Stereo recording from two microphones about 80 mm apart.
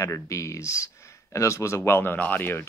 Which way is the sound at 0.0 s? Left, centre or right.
Left.